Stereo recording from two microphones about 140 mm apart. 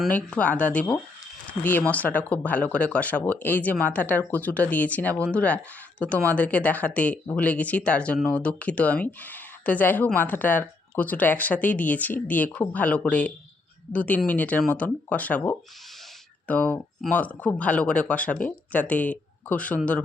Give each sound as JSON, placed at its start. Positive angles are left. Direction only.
{"t": 0.1, "sound": "speech", "side_deg": 10}